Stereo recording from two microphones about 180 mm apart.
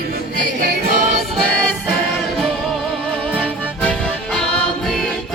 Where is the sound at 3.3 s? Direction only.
5° right (ahead or behind).